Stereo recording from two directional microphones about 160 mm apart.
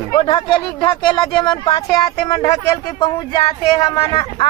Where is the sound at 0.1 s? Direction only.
30° left (ahead or behind).